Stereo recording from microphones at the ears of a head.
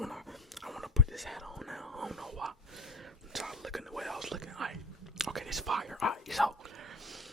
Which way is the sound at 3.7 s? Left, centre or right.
Centre.